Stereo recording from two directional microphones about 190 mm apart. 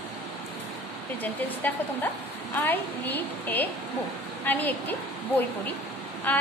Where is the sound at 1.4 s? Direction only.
10° left (ahead or behind).